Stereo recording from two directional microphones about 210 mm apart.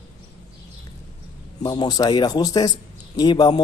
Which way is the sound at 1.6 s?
20° left (ahead or behind).